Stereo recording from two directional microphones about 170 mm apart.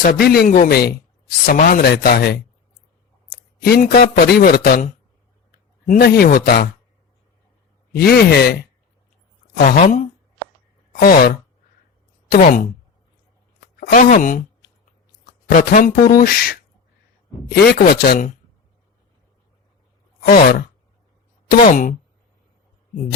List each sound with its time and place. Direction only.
0.0 s a man's voice: 65° left (ahead or behind)
3.6 s a man's voice: 65° left (ahead or behind)
7.9 s speech: 65° left (ahead or behind)
9.6 s speech: 50° left (ahead or behind)
11.0 s a man's voice: 60° left (ahead or behind)
13.7 s speech: 55° left (ahead or behind)
15.4 s a man's voice: 50° left (ahead or behind)
20.2 s a man's voice: 55° left (ahead or behind)